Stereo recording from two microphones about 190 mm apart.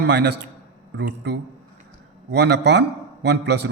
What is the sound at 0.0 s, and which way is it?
A man's voice, 60° right (ahead or behind).